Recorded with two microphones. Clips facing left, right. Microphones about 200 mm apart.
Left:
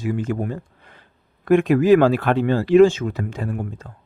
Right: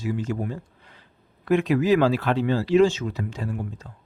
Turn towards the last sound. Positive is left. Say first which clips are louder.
# left 3 dB
turn(degrees=55)  # may be behind; listen again after turning